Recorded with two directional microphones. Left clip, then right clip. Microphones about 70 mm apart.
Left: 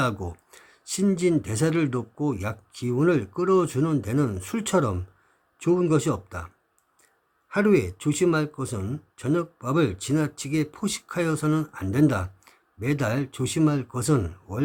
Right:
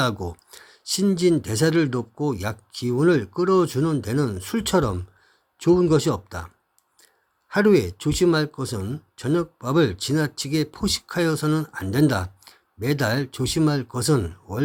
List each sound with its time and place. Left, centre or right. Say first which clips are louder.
0.0 s speech: right 2 dB; right
7.5 s speech: right 3 dB; right